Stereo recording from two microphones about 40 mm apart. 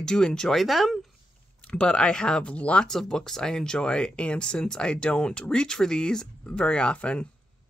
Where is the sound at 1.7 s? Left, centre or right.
Left.